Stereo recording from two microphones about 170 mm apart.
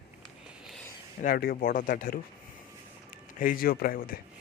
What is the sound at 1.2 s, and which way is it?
Speech, 60° left (ahead or behind).